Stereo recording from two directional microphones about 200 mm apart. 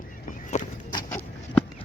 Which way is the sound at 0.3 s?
40° left (ahead or behind).